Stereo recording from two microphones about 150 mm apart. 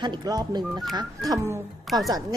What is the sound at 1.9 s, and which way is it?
Speech, centre (ahead or behind).